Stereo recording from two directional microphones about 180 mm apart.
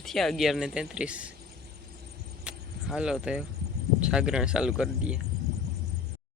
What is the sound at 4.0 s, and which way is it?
Speech, 5° right (ahead or behind).